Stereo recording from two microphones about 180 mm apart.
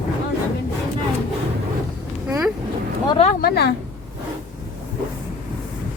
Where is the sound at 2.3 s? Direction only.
10° right (ahead or behind).